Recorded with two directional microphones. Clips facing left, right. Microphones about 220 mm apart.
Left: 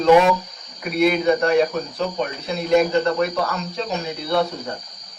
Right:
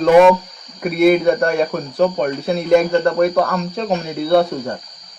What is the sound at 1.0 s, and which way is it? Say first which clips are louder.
Speech: right 5 dB; 50° right (ahead or behind).